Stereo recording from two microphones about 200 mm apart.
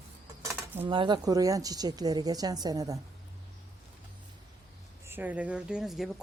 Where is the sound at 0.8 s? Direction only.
25° right (ahead or behind).